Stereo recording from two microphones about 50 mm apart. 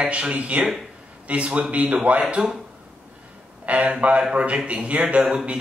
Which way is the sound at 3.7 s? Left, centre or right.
Right.